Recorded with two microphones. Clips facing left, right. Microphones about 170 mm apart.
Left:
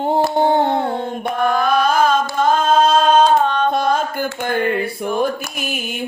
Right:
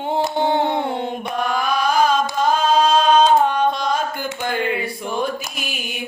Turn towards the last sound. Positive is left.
turn(degrees=55)  # may be behind; listen again after turning